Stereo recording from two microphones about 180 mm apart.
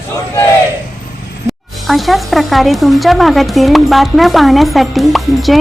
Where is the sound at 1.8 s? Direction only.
Centre (ahead or behind).